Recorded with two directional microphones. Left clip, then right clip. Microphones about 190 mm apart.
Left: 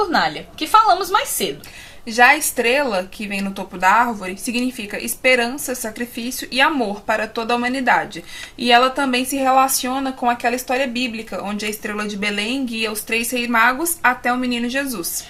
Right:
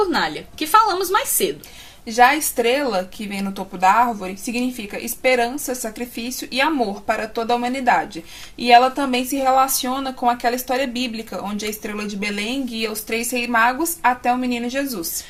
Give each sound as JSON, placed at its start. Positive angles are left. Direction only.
{"t": 0.0, "sound": "a woman's voice", "side_deg": -30}